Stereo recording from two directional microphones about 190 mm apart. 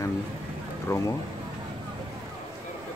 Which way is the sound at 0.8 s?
15° left (ahead or behind).